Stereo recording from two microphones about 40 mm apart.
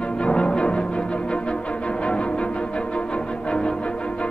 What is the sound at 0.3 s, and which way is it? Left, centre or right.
Music, left.